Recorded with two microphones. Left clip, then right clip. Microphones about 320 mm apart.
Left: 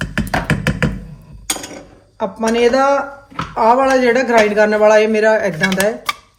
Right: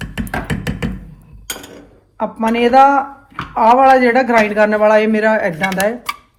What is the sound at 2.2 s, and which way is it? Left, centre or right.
A man's voice, centre.